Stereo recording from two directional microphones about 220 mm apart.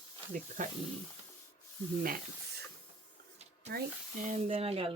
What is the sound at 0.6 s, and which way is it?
Speech, 35° right (ahead or behind).